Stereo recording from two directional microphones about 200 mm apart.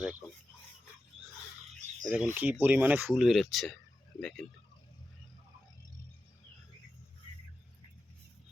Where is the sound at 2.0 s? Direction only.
5° right (ahead or behind).